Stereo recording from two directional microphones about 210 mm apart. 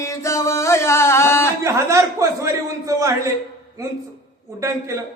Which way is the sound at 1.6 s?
15° right (ahead or behind).